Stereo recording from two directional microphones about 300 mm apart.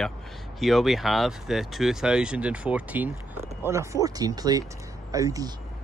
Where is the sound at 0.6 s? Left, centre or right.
Centre.